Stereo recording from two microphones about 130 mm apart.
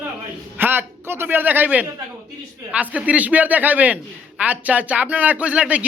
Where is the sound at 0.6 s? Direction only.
15° right (ahead or behind).